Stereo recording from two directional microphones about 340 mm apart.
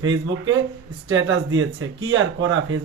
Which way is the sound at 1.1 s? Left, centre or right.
Right.